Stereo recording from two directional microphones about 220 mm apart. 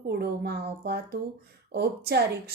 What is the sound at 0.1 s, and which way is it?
Speech, 50° right (ahead or behind).